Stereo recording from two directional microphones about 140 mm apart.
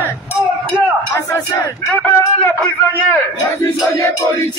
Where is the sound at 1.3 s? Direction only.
15° left (ahead or behind).